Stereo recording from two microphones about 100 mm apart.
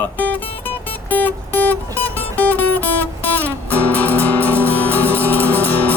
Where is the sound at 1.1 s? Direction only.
20° left (ahead or behind).